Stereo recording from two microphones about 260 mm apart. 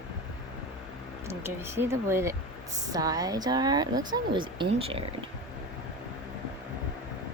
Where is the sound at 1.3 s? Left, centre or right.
Centre.